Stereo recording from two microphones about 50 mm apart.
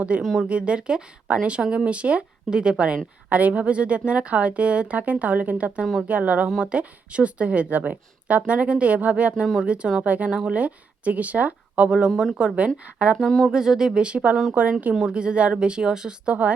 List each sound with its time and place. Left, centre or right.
0.1 s a woman's voice: right
11.9 s a woman's voice: centre
13.2 s speech: centre
13.5 s a woman's voice: centre; by 14.9 s right
15.0 s a woman's voice: centre